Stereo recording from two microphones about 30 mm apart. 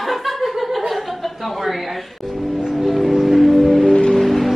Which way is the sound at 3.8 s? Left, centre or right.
Left.